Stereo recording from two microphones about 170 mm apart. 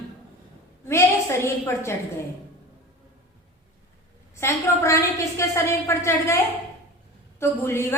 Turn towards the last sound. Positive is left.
turn(degrees=15)  # may be behind; listen again after turning